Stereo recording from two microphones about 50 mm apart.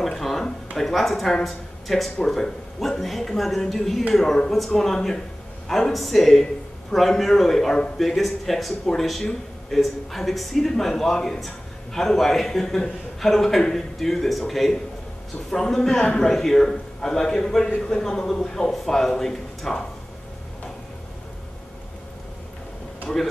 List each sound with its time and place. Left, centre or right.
0.0 s a sound: centre
0.7 s a man's voice: centre
23.1 s speech: centre